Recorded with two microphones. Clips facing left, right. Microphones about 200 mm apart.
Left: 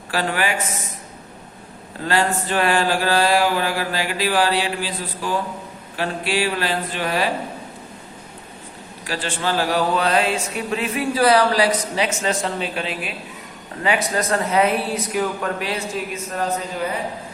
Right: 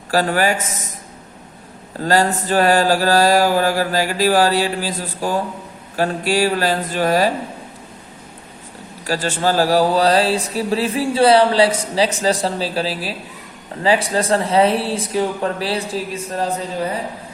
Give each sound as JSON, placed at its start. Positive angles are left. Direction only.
{"t": 0.1, "sound": "speech", "side_deg": -40}
{"t": 2.0, "sound": "speech", "side_deg": -40}
{"t": 9.0, "sound": "speech", "side_deg": -40}